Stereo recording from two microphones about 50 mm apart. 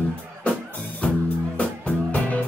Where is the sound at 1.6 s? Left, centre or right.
Left.